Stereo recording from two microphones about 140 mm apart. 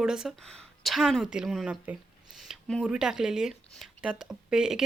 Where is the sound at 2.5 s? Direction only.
5° left (ahead or behind).